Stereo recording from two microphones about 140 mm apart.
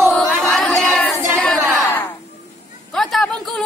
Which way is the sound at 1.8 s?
15° left (ahead or behind).